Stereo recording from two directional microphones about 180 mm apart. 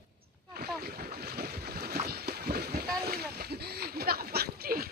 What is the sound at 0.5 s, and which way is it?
Boat, 60° right (ahead or behind).